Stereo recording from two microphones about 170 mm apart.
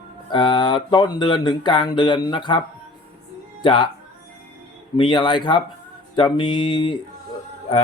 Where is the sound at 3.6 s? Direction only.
30° left (ahead or behind).